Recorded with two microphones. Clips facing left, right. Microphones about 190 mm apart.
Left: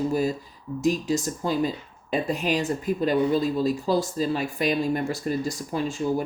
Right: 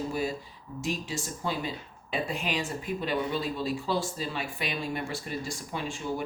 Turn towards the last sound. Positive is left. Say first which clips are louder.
# left 8 dB
turn(degrees=40)  # may be behind; listen again after turning